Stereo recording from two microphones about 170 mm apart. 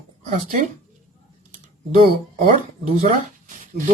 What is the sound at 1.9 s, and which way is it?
Speech, 30° right (ahead or behind).